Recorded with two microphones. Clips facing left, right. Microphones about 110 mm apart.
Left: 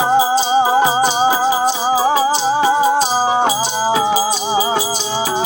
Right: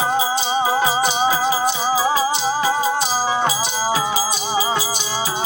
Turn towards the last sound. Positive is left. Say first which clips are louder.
# left 5 dB
turn(degrees=25)  # may be behind; listen again after turning